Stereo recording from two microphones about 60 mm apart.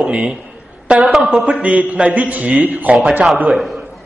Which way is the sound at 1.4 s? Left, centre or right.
Right.